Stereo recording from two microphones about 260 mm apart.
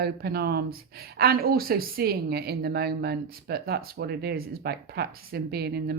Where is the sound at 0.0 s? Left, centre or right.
Right.